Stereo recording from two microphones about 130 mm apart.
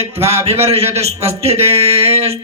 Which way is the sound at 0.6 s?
50° right (ahead or behind).